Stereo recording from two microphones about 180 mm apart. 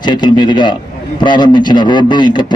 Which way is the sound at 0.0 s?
25° left (ahead or behind).